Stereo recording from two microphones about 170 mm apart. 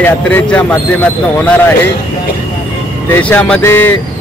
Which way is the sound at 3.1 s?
10° left (ahead or behind).